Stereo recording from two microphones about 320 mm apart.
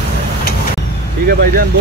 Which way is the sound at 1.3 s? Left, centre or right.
Right.